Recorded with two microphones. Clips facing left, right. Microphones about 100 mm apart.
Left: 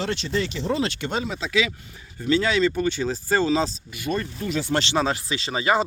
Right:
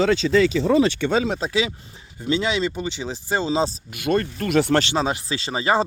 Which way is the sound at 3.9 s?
60° right (ahead or behind).